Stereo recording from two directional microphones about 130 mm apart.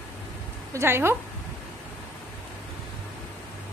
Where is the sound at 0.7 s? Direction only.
20° right (ahead or behind).